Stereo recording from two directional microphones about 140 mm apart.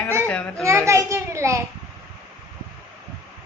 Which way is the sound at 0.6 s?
20° right (ahead or behind).